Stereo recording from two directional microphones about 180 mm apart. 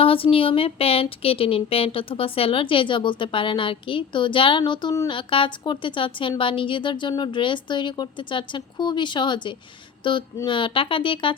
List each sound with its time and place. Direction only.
0.0 s speech: 30° left (ahead or behind)